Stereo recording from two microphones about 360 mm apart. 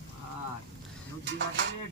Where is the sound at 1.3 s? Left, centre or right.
Right.